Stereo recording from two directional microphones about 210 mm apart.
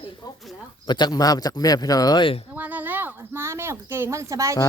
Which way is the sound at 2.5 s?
5° right (ahead or behind).